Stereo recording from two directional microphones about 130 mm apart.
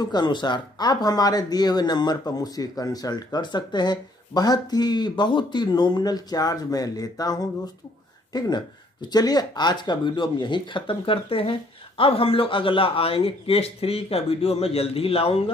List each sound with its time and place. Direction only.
0.0 s a man's voice: 35° left (ahead or behind)